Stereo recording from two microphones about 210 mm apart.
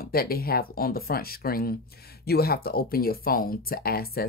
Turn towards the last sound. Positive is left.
turn(degrees=45)  # may be behind; listen again after turning